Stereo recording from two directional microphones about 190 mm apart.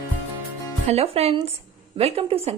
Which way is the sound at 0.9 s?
30° right (ahead or behind).